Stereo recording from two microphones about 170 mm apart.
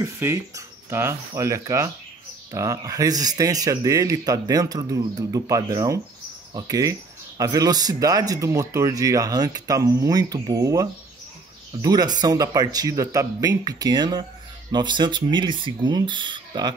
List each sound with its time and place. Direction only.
0.0 s speech: 20° right (ahead or behind)